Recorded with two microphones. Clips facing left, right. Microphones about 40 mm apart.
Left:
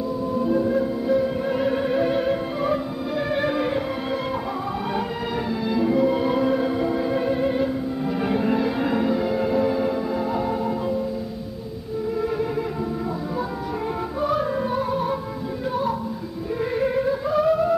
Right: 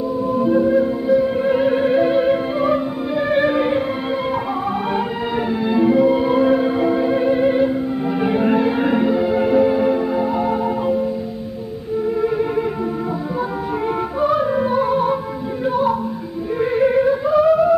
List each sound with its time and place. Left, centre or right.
0.3 s music: right
5.5 s music: right
6.0 s music: centre
12.2 s music: centre
14.2 s music: centre
16.7 s a sound: right
17.3 s music: centre